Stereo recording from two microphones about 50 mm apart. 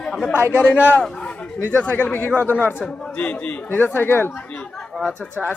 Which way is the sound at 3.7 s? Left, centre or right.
Left.